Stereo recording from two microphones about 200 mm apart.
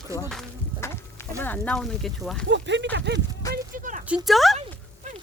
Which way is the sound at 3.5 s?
40° right (ahead or behind).